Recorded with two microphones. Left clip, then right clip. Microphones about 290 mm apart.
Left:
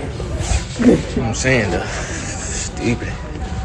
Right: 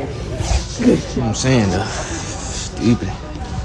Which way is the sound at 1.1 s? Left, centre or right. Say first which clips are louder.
Left 1 dB; centre.